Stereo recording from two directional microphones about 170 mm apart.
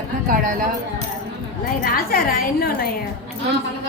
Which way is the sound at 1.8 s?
60° left (ahead or behind).